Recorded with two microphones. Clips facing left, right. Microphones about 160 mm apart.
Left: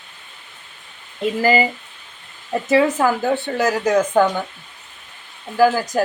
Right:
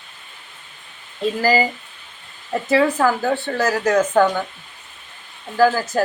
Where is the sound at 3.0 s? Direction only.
20° left (ahead or behind).